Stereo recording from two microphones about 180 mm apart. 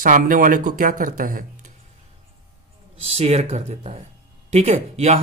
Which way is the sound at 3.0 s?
35° right (ahead or behind).